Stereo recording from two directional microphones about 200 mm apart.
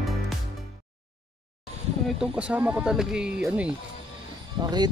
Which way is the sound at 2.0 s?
5° right (ahead or behind).